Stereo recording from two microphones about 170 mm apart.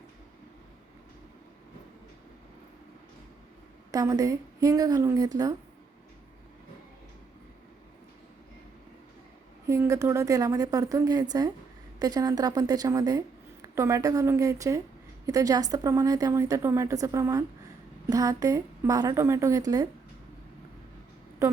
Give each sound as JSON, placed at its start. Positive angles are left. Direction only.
{"t": 3.9, "sound": "a woman's voice", "side_deg": -20}
{"t": 9.6, "sound": "a woman's voice", "side_deg": -20}